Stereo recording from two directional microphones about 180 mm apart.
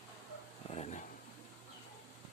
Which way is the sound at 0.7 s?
35° left (ahead or behind).